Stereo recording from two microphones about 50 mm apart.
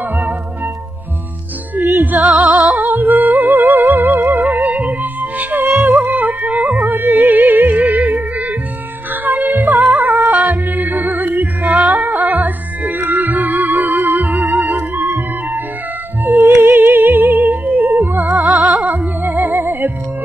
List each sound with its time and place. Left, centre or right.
2.0 s music: right
18.2 s music: centre
18.9 s music: right